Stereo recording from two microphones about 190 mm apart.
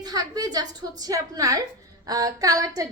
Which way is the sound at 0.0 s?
20° right (ahead or behind).